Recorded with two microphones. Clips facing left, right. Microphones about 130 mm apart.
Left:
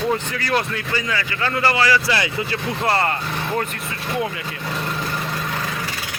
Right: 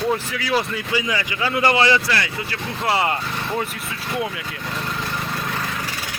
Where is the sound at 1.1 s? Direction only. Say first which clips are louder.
Even; 15° right (ahead or behind).